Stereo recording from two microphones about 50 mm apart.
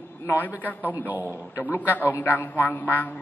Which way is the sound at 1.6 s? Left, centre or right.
Left.